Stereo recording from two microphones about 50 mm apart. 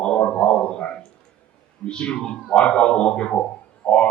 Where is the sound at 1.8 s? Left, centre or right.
Centre.